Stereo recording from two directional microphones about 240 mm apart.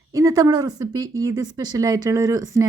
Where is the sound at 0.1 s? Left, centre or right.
Centre.